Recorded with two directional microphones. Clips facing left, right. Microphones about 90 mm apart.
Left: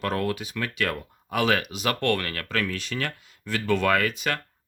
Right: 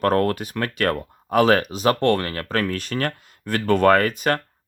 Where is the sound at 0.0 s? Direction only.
50° right (ahead or behind).